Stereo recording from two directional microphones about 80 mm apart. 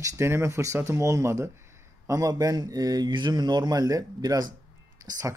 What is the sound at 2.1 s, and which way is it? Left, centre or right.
A man's voice, right.